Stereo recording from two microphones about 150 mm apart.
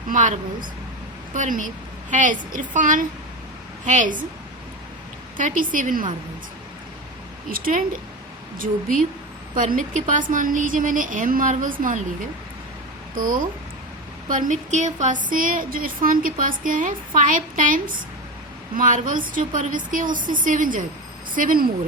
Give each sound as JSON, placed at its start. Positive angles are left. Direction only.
{"t": 0.1, "sound": "speech", "side_deg": -60}
{"t": 5.4, "sound": "speech", "side_deg": -60}
{"t": 7.5, "sound": "speech", "side_deg": -70}
{"t": 13.1, "sound": "speech", "side_deg": -65}